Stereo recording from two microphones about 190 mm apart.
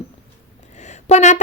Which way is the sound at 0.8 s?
35° left (ahead or behind).